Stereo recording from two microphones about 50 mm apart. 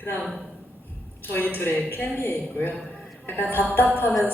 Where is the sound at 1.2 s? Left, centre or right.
Left.